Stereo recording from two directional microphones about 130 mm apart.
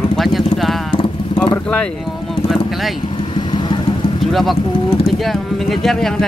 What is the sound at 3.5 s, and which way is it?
Vehicle, 35° left (ahead or behind).